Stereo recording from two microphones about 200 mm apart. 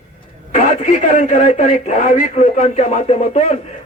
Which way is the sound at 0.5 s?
40° left (ahead or behind).